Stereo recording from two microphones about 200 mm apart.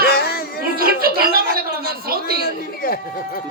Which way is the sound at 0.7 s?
50° right (ahead or behind).